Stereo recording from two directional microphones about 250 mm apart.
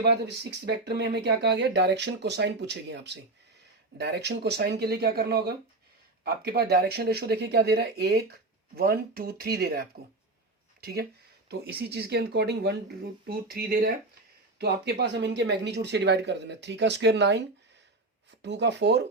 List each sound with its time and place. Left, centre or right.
0.6 s speech: right
10.8 s a sound: right
11.4 s speech: right